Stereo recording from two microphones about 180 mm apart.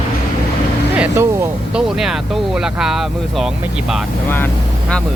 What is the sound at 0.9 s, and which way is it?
Speech, 10° right (ahead or behind).